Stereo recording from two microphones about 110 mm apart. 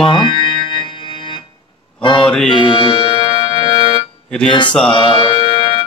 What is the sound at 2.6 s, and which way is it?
Music, 50° left (ahead or behind).